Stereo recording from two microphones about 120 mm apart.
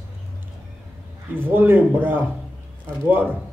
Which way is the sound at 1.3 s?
15° right (ahead or behind).